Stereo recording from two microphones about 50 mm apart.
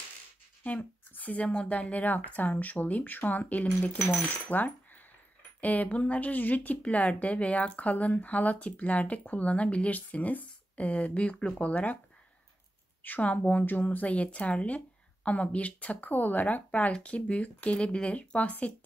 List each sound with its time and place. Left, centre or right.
0.7 s a woman's voice: left
11.6 s a woman's voice: left
13.0 s a woman's voice: left